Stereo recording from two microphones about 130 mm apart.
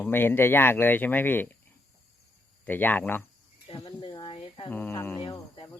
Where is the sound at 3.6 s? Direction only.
45° left (ahead or behind).